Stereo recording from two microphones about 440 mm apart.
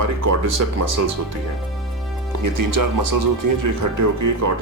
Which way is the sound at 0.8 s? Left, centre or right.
Right.